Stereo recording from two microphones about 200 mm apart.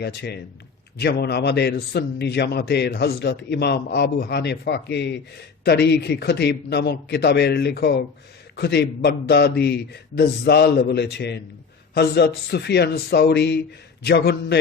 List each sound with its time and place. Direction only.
0.0 s a man's voice: 55° left (ahead or behind)